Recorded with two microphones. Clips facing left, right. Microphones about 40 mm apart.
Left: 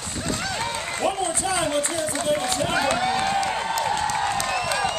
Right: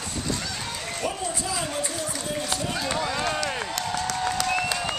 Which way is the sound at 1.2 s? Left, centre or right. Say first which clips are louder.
Left 5 dB; left.